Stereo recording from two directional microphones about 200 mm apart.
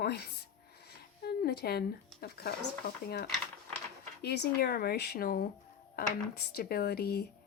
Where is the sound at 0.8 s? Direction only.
55° left (ahead or behind).